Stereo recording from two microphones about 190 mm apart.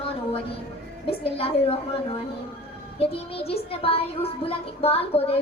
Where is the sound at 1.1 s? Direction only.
30° left (ahead or behind).